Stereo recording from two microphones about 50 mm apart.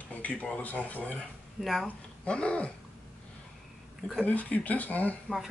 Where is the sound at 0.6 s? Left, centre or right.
Left.